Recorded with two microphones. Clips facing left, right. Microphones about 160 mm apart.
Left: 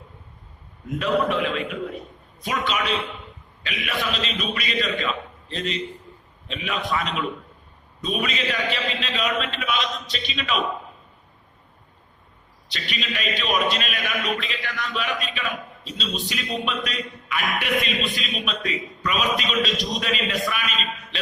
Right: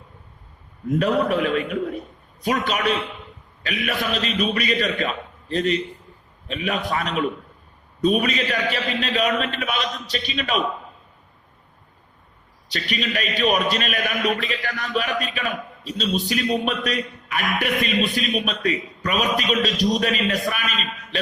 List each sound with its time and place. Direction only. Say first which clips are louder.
0.9 s speech: right 2 dB; 40° right (ahead or behind)
12.7 s speech: right 5 dB; 40° right (ahead or behind)